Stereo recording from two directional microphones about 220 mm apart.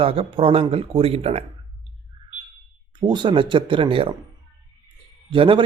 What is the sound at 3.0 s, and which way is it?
A man's voice, 20° right (ahead or behind).